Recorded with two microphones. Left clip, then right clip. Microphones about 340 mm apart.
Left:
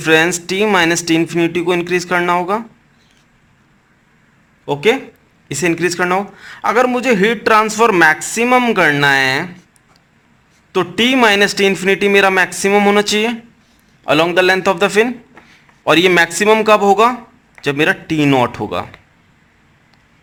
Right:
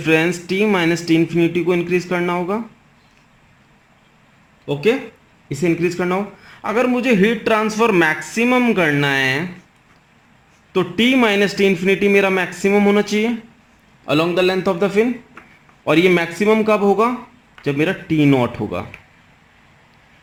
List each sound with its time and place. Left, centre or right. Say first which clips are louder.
0.0 s a man's voice: left 4 dB; left
4.7 s a man's voice: left 4 dB; left
5.5 s a man's voice: left 3 dB; left
10.8 s a man's voice: left 3 dB; left
14.1 s a man's voice: left 5 dB; left
14.6 s a man's voice: left 4 dB; left